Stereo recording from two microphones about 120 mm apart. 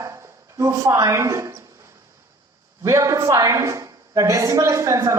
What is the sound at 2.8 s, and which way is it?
A woman's voice, 25° right (ahead or behind).